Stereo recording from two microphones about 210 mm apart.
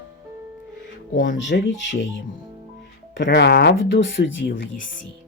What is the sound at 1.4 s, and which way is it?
Speech, 60° left (ahead or behind).